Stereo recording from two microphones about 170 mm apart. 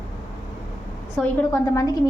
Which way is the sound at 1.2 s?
5° left (ahead or behind).